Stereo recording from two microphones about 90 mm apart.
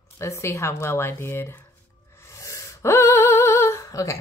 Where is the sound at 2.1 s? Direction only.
30° left (ahead or behind).